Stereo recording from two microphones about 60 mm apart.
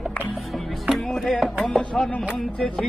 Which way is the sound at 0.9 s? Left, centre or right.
Centre.